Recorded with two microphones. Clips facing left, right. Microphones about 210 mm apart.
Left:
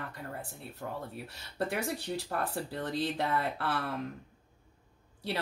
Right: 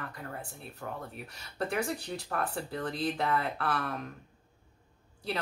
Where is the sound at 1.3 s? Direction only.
30° left (ahead or behind).